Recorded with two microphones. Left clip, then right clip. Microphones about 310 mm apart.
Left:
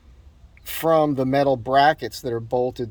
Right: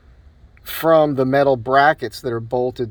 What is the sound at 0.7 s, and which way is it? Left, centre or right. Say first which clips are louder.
Speech: right 4 dB; left.